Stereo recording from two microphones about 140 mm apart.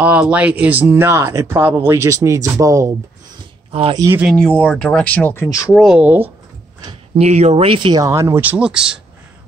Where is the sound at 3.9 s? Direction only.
25° right (ahead or behind).